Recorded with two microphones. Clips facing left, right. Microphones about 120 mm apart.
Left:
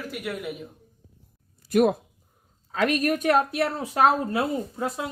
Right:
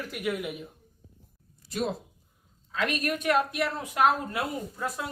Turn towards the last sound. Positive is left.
turn(degrees=25)  # may be behind; listen again after turning